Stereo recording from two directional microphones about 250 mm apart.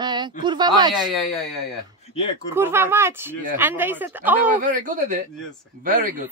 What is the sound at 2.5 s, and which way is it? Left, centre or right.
Speech, centre.